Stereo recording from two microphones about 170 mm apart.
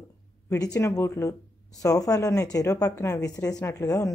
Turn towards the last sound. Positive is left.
turn(degrees=20)  # may be behind; listen again after turning